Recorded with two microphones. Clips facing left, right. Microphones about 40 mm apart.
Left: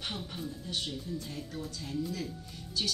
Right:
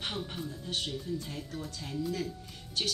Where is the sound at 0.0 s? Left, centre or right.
Right.